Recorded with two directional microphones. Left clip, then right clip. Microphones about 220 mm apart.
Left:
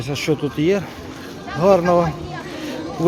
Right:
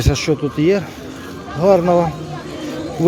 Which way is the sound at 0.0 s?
15° right (ahead or behind).